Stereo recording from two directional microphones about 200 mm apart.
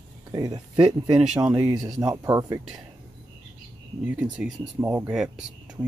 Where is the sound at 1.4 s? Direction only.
5° right (ahead or behind).